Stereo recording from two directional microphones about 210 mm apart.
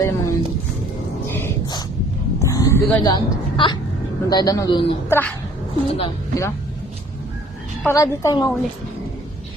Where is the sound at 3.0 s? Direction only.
20° left (ahead or behind).